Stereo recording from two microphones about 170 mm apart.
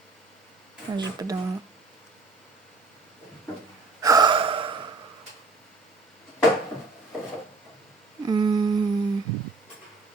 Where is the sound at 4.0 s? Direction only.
20° right (ahead or behind).